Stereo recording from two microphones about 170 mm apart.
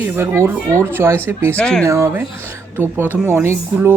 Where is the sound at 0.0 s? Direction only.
15° right (ahead or behind).